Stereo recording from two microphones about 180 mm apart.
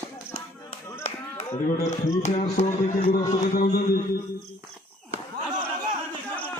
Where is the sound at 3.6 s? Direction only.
55° left (ahead or behind).